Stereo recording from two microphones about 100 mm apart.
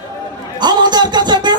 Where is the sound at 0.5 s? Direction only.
45° right (ahead or behind).